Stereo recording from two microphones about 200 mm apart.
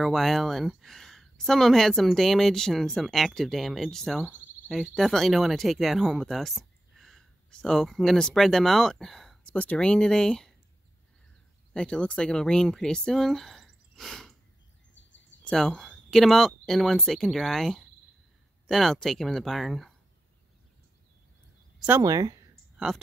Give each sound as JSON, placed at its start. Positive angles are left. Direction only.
{"t": 0.0, "sound": "speech", "side_deg": 0}
{"t": 11.7, "sound": "speech", "side_deg": 5}
{"t": 15.4, "sound": "speech", "side_deg": 0}
{"t": 21.7, "sound": "speech", "side_deg": -10}